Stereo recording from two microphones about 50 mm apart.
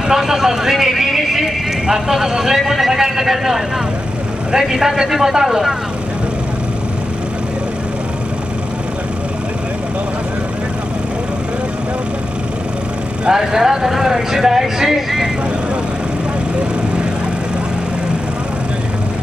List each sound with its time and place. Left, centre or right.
0.1 s speech: centre
13.3 s speech: centre